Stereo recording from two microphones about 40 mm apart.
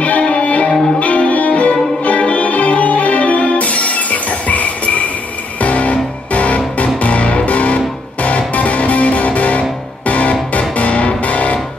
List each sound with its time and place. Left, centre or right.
0.0 s music: left